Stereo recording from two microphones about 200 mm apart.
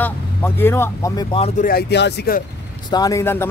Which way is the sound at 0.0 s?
10° left (ahead or behind).